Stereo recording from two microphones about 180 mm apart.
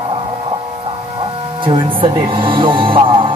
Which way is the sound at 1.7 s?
30° right (ahead or behind).